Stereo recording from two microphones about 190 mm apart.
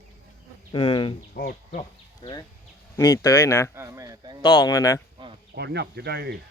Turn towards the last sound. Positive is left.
turn(degrees=-60)  # may be behind; listen again after turning